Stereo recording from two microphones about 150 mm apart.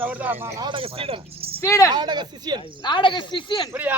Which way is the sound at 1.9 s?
30° right (ahead or behind).